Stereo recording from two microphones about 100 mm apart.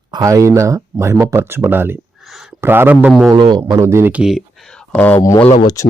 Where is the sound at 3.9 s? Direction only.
25° right (ahead or behind).